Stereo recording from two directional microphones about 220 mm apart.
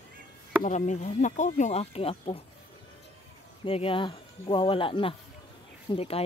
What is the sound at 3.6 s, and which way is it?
Speech, 25° left (ahead or behind).